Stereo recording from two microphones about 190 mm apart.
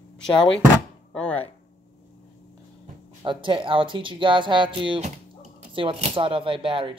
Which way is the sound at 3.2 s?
25° right (ahead or behind).